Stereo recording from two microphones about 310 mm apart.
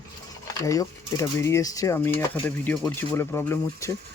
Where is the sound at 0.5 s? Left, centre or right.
Centre.